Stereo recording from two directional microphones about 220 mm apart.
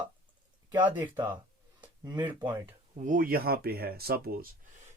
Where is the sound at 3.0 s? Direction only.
40° right (ahead or behind).